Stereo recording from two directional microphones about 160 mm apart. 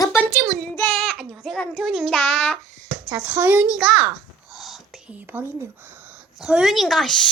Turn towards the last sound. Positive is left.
turn(degrees=5)  # may be behind; listen again after turning